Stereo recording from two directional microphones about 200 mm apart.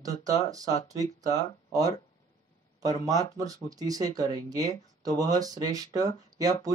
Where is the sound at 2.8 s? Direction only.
15° right (ahead or behind).